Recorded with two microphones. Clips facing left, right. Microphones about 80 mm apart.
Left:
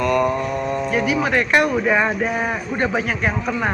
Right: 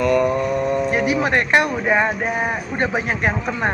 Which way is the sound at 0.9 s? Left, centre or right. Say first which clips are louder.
Right 1 dB; right.